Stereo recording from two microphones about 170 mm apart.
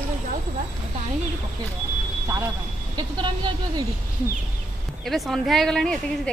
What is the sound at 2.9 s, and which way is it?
Speech, 25° right (ahead or behind).